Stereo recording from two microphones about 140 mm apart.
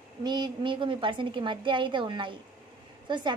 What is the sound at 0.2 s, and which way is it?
A woman's voice, 30° right (ahead or behind).